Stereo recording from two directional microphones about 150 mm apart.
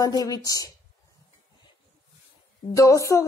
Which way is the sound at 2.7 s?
20° left (ahead or behind).